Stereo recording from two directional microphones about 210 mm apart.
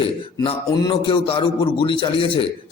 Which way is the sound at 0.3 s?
20° left (ahead or behind).